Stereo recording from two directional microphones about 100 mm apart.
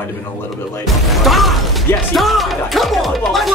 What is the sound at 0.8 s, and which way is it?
Speech, centre (ahead or behind).